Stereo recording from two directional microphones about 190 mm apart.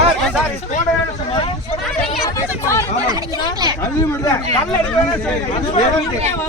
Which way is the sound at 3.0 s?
20° right (ahead or behind).